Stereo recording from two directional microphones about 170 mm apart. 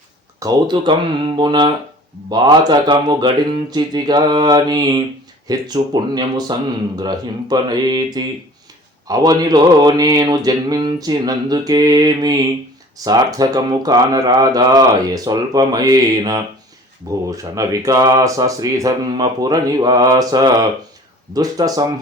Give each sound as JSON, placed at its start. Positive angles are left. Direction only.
{"t": 0.3, "sound": "speech", "side_deg": -25}